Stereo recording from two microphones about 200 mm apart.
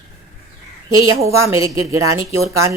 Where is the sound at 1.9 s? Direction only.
90° right.